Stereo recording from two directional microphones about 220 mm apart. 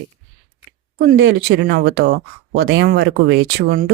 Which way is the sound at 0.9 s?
45° right (ahead or behind).